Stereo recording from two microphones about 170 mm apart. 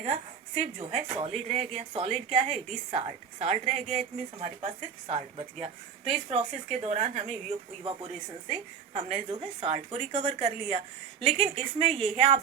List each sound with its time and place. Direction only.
0.0 s a woman's voice: 45° right (ahead or behind)